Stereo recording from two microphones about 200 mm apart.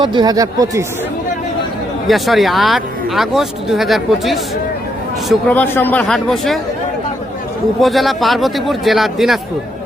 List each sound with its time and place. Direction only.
0.0 s speech: 20° right (ahead or behind)
2.0 s speech: centre (ahead or behind)
7.8 s speech: centre (ahead or behind)